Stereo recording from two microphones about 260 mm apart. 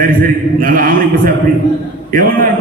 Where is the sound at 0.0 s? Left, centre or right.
Right.